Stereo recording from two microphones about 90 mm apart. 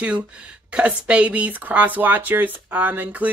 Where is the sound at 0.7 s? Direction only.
15° right (ahead or behind).